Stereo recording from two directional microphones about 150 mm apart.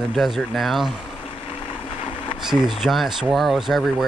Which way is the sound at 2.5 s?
Centre (ahead or behind).